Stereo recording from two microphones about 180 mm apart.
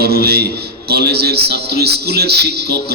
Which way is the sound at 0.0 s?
60° right (ahead or behind).